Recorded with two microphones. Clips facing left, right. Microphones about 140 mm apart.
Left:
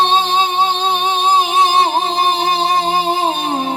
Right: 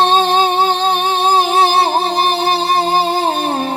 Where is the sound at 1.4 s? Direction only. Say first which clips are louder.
Right 1 dB; 40° right (ahead or behind).